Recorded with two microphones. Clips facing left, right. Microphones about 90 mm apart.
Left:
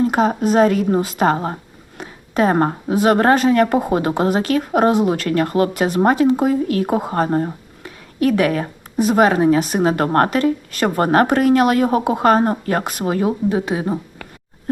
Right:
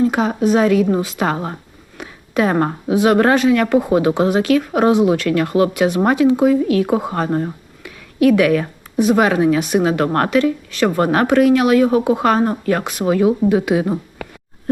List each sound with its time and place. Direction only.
0.0 s a woman's voice: 40° left (ahead or behind)
7.3 s speech: 30° left (ahead or behind)